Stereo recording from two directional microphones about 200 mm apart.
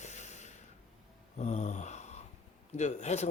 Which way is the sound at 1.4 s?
35° left (ahead or behind).